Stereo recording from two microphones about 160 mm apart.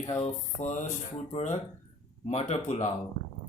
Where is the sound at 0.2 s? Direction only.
45° left (ahead or behind).